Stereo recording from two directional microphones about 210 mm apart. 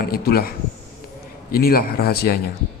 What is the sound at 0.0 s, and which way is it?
Speech, 45° left (ahead or behind).